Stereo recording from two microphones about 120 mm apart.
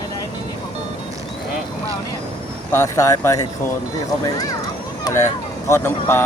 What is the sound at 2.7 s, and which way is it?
Speech, 25° left (ahead or behind).